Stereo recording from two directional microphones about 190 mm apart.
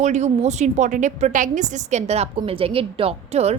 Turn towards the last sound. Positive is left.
turn(degrees=-35)  # may be behind; listen again after turning